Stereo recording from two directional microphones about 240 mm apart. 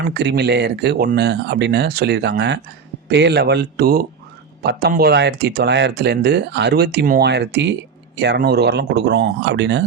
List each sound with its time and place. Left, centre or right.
0.1 s speech: right